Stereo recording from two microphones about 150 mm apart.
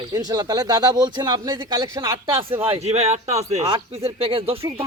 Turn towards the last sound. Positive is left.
turn(degrees=-40)  # may be behind; listen again after turning